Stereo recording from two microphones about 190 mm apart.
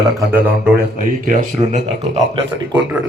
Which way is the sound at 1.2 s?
40° right (ahead or behind).